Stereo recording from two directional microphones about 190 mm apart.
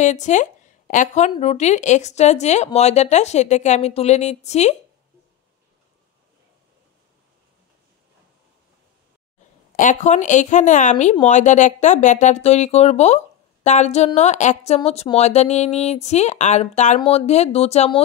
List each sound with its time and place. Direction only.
0.0 s a woman's voice: 40° left (ahead or behind)
9.8 s a woman's voice: 40° left (ahead or behind)